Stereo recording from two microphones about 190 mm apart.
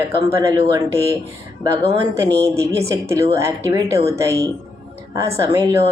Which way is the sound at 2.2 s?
15° right (ahead or behind).